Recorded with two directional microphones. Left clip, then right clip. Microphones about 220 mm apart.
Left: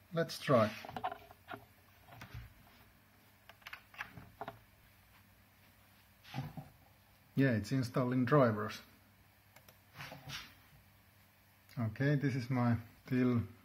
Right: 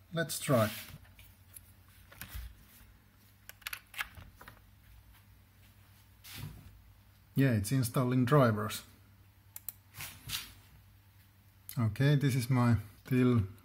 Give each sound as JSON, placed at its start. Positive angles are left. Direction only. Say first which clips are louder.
{"t": 0.1, "sound": "speech", "louder": "even", "side_deg": 0}
{"t": 7.3, "sound": "speech", "louder": "right 2 dB", "side_deg": -15}
{"t": 11.7, "sound": "speech", "louder": "right 3 dB", "side_deg": -30}
{"t": 13.1, "sound": "speech", "louder": "right 4 dB", "side_deg": -20}